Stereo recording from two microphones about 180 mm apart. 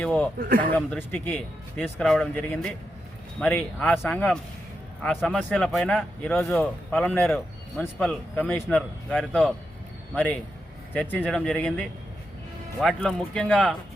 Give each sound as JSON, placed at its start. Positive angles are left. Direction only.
{"t": 0.0, "sound": "speech", "side_deg": 5}
{"t": 0.3, "sound": "a man's voice", "side_deg": -50}
{"t": 0.8, "sound": "speech", "side_deg": 10}
{"t": 10.9, "sound": "speech", "side_deg": 10}